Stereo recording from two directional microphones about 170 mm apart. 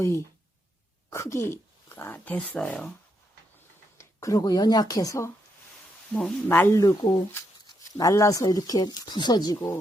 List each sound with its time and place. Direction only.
0.0 s speech: 15° left (ahead or behind)
3.9 s speech: 20° left (ahead or behind)